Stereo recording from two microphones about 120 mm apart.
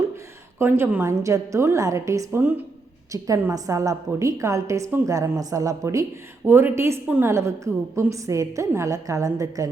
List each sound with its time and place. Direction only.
0.6 s a woman's voice: 20° right (ahead or behind)